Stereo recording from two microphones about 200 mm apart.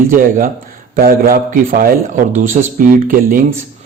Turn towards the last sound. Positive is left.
turn(degrees=-45)  # may be behind; listen again after turning